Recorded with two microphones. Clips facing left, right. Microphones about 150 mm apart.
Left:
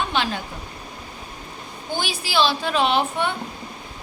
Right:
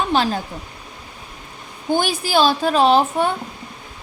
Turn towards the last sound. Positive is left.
turn(degrees=-40)  # may be behind; listen again after turning